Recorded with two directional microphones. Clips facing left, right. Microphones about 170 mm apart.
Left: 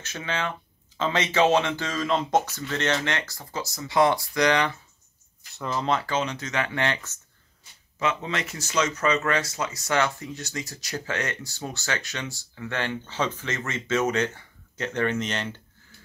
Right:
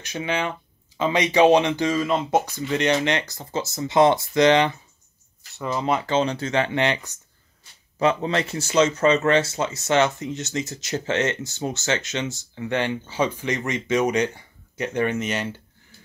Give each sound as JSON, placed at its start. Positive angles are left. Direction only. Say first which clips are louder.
{"t": 0.0, "sound": "speech", "louder": "right 4 dB", "side_deg": -15}
{"t": 5.6, "sound": "speech", "louder": "right 2 dB", "side_deg": -5}
{"t": 6.0, "sound": "speech", "louder": "right 6 dB", "side_deg": -30}
{"t": 8.0, "sound": "speech", "louder": "right 6 dB", "side_deg": -35}